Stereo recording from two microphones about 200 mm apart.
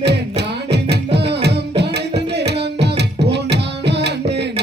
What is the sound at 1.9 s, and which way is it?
Tabla, 55° right (ahead or behind).